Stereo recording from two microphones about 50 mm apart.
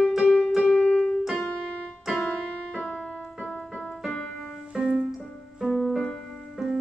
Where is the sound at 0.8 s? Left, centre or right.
Centre.